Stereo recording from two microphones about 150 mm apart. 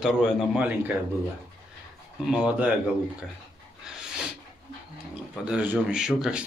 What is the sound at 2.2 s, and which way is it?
Speech, 5° right (ahead or behind).